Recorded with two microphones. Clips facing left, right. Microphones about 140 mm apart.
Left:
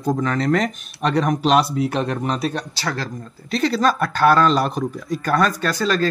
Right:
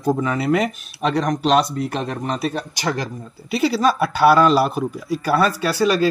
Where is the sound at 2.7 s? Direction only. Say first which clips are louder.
Right 2 dB; 15° right (ahead or behind).